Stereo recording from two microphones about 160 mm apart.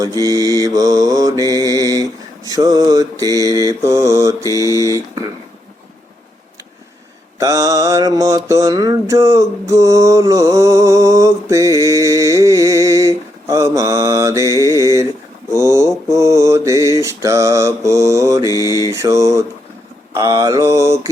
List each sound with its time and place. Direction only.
0.2 s mantra: 20° right (ahead or behind)
7.3 s mantra: 20° right (ahead or behind)
14.6 s a sound: 20° right (ahead or behind)
16.0 s mantra: 20° right (ahead or behind)
18.4 s mantra: 20° left (ahead or behind)
18.9 s mantra: 20° right (ahead or behind)